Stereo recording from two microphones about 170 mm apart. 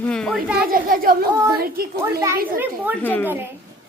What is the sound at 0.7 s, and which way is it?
A child's voice, 60° right (ahead or behind).